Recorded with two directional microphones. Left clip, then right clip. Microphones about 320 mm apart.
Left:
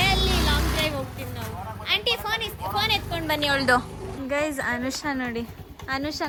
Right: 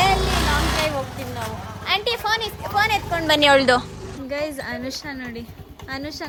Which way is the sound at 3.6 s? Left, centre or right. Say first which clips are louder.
Right 3 dB; centre.